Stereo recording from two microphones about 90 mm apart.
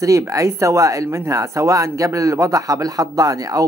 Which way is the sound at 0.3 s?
35° right (ahead or behind).